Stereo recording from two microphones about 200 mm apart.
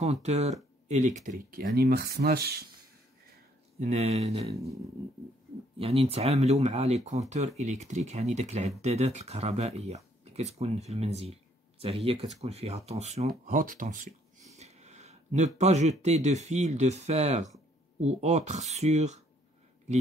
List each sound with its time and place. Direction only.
0.0 s speech: 35° right (ahead or behind)
1.7 s speech: 50° right (ahead or behind)
3.8 s speech: 35° right (ahead or behind)
5.8 s speech: 30° right (ahead or behind)